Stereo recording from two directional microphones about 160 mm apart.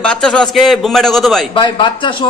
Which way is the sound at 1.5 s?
30° left (ahead or behind).